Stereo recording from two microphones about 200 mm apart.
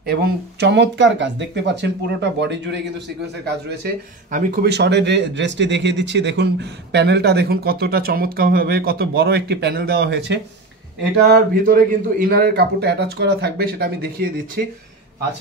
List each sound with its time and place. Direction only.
0.0 s speech: 50° right (ahead or behind)
3.4 s speech: 45° right (ahead or behind)
11.2 s speech: 45° right (ahead or behind)